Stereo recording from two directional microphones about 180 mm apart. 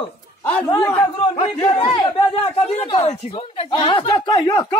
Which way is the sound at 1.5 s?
25° left (ahead or behind).